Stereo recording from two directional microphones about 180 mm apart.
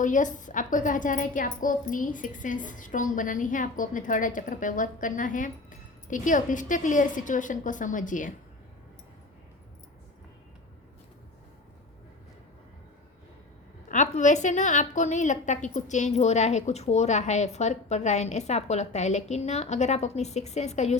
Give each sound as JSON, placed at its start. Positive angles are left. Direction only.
{"t": 0.0, "sound": "a woman's voice", "side_deg": 45}
{"t": 13.8, "sound": "a woman's voice", "side_deg": 45}